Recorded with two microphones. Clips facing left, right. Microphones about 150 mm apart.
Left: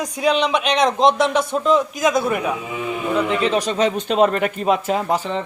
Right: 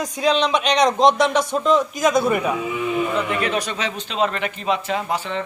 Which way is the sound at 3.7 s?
45° left (ahead or behind).